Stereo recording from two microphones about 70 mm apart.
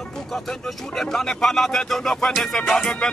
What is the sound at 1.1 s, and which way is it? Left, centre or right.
Music, centre.